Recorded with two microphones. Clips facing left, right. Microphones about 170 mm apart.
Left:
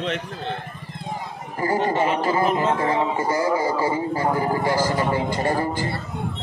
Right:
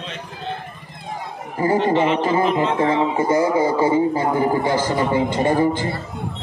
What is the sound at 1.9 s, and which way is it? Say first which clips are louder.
Speech: right 4 dB; 45° left (ahead or behind).